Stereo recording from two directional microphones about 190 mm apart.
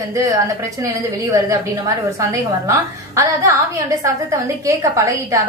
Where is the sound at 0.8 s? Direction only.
15° right (ahead or behind).